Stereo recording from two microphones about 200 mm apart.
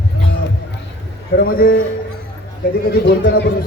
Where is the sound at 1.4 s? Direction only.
45° left (ahead or behind).